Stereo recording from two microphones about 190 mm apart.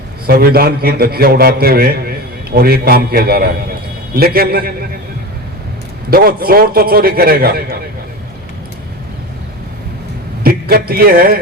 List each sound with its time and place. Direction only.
0.3 s a man's voice: 55° right (ahead or behind)
6.1 s a man's voice: 50° right (ahead or behind)
10.4 s a man's voice: 50° right (ahead or behind)